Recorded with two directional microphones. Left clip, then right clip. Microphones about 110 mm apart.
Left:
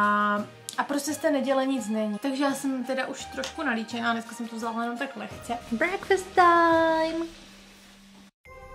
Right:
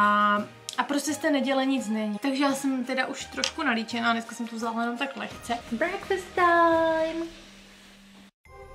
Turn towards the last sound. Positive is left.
turn(degrees=20)  # may be behind; listen again after turning